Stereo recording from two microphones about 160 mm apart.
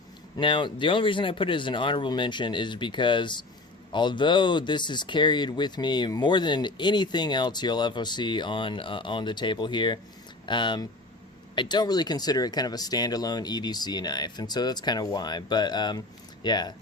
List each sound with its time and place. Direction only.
0.3 s speech: 30° left (ahead or behind)